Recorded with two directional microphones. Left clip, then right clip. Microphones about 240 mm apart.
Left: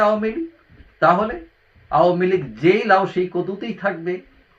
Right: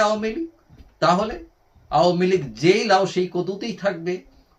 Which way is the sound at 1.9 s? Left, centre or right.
Centre.